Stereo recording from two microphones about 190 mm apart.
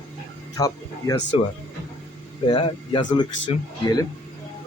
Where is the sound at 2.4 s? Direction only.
25° left (ahead or behind).